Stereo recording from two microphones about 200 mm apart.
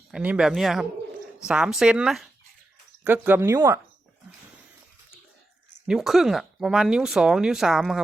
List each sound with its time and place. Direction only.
0.1 s speech: 5° right (ahead or behind)
5.9 s speech: centre (ahead or behind)